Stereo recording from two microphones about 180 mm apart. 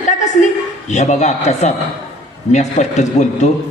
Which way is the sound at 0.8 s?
40° left (ahead or behind).